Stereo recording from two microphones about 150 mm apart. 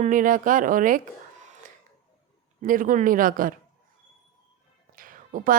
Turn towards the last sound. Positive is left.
turn(degrees=-65)  # may be behind; listen again after turning